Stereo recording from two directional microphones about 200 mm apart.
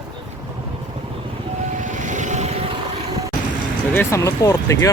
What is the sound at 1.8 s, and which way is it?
Vehicle, 40° right (ahead or behind).